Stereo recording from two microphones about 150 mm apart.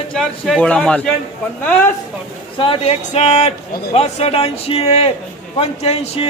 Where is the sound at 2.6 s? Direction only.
40° left (ahead or behind).